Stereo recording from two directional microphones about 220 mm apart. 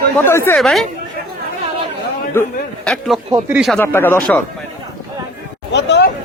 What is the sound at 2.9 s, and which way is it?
Speech, centre (ahead or behind).